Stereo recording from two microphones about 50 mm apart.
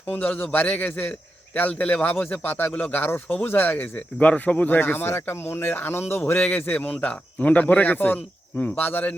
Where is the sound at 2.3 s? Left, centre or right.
Left.